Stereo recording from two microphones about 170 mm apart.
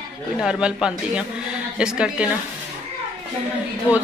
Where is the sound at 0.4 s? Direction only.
5° right (ahead or behind).